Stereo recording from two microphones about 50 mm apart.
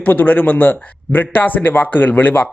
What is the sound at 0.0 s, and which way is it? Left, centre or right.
Speech, left.